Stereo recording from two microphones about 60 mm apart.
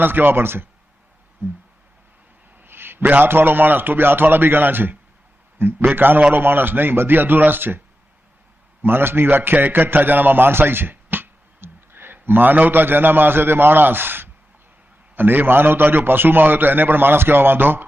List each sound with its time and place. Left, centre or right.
0.0 s a man's voice: right
2.6 s a sound: right
3.2 s a man's voice: right
8.8 s a man's voice: right